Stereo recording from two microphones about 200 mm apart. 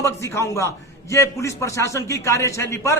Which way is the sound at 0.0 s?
15° left (ahead or behind).